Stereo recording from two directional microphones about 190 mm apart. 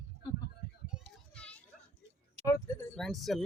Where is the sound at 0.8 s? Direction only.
5° right (ahead or behind).